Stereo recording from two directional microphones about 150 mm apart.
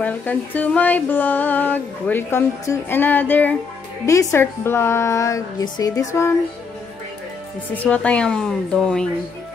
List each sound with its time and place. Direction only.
0.0 s a sound: 10° left (ahead or behind)
4.0 s a woman's voice: 20° left (ahead or behind)
7.8 s a woman's voice: 10° left (ahead or behind)